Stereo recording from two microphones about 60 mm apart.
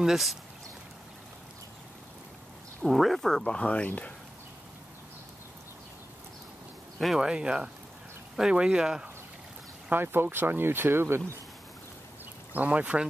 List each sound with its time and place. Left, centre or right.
0.0 s speech: centre
2.8 s speech: centre
3.5 s speech: left
7.2 s speech: centre
9.8 s speech: right
12.5 s speech: right